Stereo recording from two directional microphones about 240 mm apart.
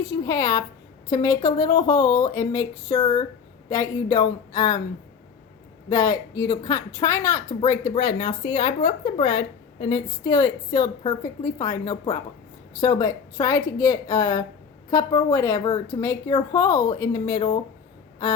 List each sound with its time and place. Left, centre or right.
0.1 s a woman's voice: centre
5.9 s a woman's voice: centre